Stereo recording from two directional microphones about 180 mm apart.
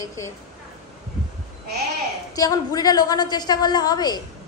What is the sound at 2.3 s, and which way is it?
A woman's voice, 20° left (ahead or behind).